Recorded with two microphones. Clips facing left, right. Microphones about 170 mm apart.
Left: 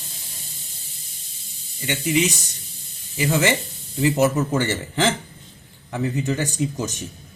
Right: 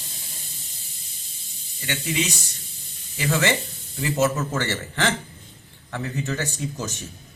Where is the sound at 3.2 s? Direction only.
20° left (ahead or behind).